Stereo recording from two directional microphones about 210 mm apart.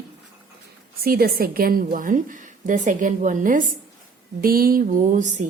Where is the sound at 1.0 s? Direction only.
45° right (ahead or behind).